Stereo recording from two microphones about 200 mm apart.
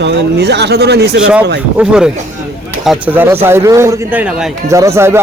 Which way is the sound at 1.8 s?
5° right (ahead or behind).